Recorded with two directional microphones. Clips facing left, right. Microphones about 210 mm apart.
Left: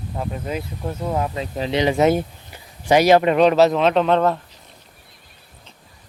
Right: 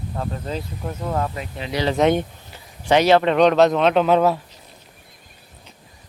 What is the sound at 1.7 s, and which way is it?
Speech, 20° left (ahead or behind).